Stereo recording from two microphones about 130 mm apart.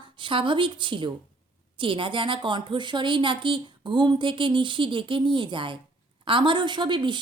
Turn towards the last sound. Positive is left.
turn(degrees=-35)  # may be behind; listen again after turning